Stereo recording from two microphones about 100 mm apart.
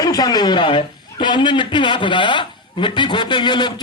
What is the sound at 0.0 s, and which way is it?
A man's voice, 40° left (ahead or behind).